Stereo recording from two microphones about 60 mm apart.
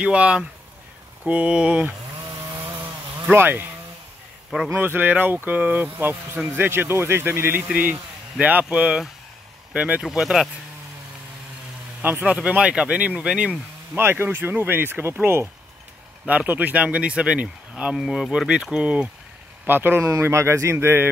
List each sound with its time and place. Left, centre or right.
0.0 s speech: centre
3.3 s speech: right
4.7 s speech: right
10.1 s speech: centre
12.0 s speech: right
12.3 s speech: centre
13.9 s speech: right
16.3 s speech: right
17.9 s speech: centre
18.5 s speech: centre
19.6 s speech: right
20.0 s speech: right